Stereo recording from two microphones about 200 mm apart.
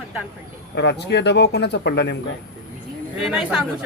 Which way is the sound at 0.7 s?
55° left (ahead or behind).